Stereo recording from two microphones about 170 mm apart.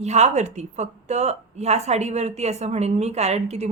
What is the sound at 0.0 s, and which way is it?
A woman's voice, 40° right (ahead or behind).